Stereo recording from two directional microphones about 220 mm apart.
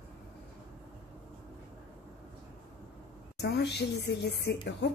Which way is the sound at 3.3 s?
50° left (ahead or behind).